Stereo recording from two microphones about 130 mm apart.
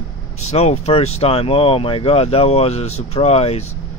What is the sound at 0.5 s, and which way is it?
Speech, 55° left (ahead or behind).